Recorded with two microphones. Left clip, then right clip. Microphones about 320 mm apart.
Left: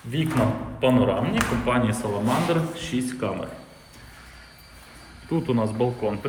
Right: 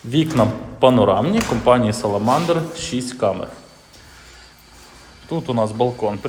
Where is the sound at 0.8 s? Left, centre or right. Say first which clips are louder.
Right 8 dB; centre.